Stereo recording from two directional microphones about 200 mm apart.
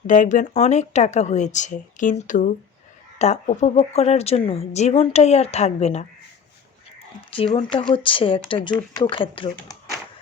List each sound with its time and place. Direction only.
0.1 s a woman's voice: 40° left (ahead or behind)
7.5 s speech: 25° left (ahead or behind)